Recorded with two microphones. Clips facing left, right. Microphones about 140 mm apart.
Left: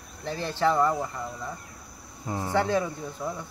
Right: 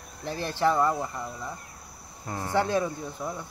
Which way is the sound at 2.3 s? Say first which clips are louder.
Left 2 dB; 15° left (ahead or behind).